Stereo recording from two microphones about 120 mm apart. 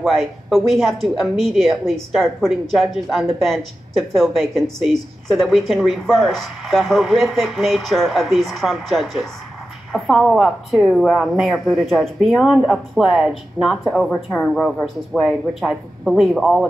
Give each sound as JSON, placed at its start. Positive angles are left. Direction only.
{"t": 0.0, "sound": "a woman's voice", "side_deg": 0}